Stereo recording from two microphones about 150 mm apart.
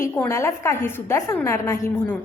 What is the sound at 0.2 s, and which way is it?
A woman's voice, 20° left (ahead or behind).